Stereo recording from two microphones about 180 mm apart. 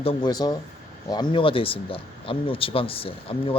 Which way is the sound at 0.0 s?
30° left (ahead or behind).